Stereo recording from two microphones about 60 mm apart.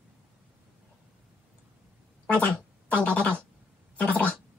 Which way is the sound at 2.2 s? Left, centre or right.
Left.